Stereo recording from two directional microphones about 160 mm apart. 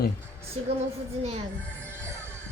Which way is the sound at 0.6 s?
40° right (ahead or behind).